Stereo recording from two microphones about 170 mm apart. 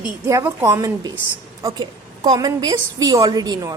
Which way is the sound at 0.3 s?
15° right (ahead or behind).